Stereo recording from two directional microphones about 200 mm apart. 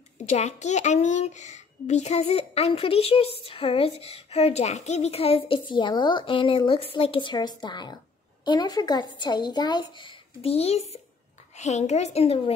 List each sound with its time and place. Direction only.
0.3 s a child's voice: 35° left (ahead or behind)